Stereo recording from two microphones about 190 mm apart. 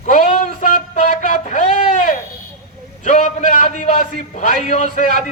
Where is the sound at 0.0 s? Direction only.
45° left (ahead or behind).